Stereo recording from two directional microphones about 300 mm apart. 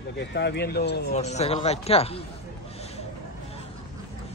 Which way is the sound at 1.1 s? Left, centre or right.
Left.